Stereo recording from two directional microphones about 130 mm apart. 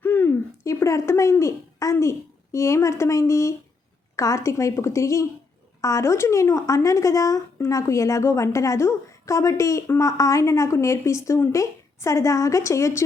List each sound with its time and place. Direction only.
0.0 s speech: 15° left (ahead or behind)